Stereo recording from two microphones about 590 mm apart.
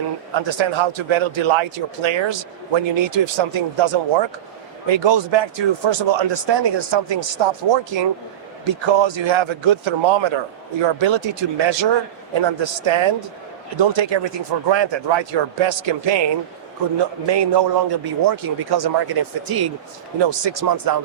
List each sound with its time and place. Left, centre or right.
0.3 s a man's voice: right